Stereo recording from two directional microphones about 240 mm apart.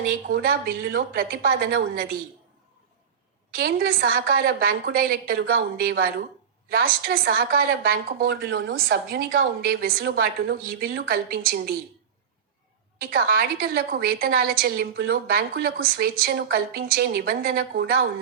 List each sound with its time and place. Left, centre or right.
0.3 s a woman's voice: right
3.5 s a woman's voice: right
13.0 s a woman's voice: right